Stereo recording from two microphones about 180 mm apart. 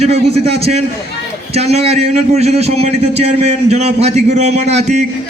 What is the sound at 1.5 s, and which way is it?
A man's voice, 35° right (ahead or behind).